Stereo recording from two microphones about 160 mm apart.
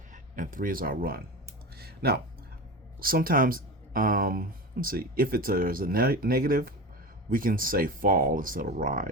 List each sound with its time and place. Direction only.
0.1 s speech: 55° right (ahead or behind)
1.7 s a sound: 80° right
3.0 s speech: 65° right (ahead or behind)